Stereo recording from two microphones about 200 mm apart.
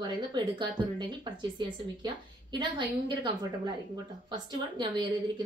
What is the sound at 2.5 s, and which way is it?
Speech, 25° right (ahead or behind).